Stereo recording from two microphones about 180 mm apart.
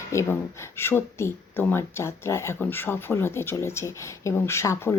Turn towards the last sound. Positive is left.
turn(degrees=15)  # may be behind; listen again after turning